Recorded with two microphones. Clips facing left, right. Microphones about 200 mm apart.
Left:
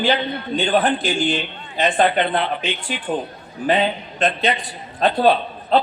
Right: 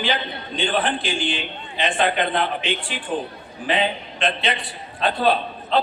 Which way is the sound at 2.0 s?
45° right (ahead or behind).